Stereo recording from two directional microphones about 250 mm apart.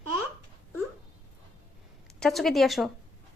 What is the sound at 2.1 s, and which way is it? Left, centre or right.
Speech, centre.